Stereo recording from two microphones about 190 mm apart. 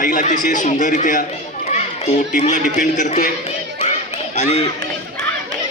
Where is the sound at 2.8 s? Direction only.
40° left (ahead or behind).